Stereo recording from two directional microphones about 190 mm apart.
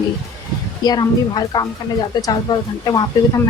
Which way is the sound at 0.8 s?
20° left (ahead or behind).